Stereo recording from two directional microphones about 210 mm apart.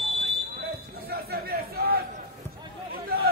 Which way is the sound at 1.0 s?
45° right (ahead or behind).